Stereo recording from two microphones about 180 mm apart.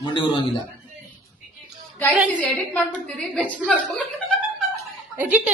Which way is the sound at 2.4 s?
5° left (ahead or behind).